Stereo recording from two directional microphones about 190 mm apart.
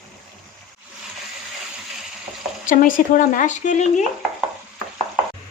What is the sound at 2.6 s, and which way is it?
Speech, 45° left (ahead or behind).